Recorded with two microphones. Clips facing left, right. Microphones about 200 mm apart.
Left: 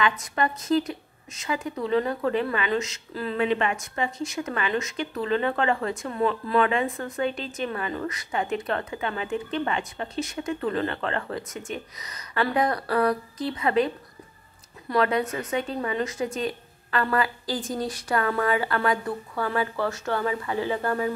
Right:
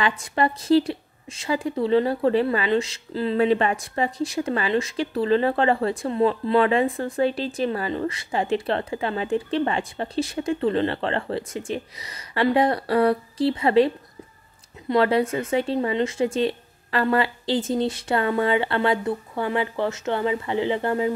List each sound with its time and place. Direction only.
0.0 s a woman's voice: 30° right (ahead or behind)